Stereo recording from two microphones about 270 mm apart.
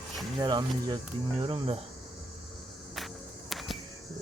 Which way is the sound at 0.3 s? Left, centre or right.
Centre.